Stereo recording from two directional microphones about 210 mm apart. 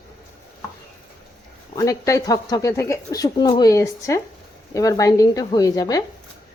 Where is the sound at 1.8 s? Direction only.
15° left (ahead or behind).